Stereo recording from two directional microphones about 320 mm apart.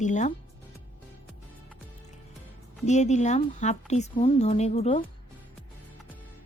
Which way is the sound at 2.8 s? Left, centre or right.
Left.